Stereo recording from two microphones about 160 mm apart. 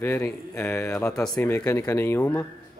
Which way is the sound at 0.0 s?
15° left (ahead or behind).